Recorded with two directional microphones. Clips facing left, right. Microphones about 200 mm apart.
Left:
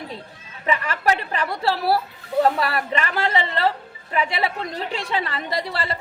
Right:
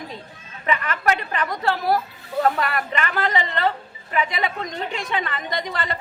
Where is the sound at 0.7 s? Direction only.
30° left (ahead or behind).